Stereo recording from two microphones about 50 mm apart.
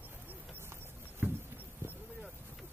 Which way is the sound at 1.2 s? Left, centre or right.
Right.